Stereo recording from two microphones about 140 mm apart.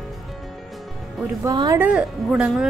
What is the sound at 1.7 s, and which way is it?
Speech, 10° right (ahead or behind).